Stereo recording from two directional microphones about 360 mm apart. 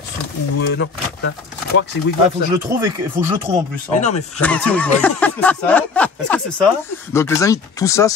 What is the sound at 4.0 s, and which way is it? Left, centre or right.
Speech, centre.